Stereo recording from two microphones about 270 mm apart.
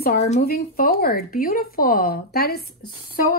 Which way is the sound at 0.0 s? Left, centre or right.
Left.